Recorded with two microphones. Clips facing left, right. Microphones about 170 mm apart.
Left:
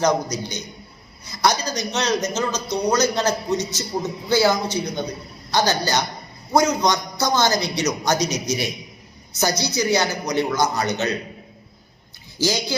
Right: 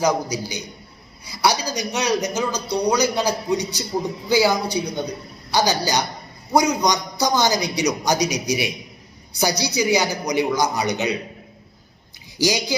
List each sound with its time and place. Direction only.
0.0 s speech: 10° right (ahead or behind)
12.4 s speech: 15° right (ahead or behind)